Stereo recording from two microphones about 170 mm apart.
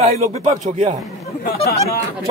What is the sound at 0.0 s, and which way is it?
Speech, 40° right (ahead or behind).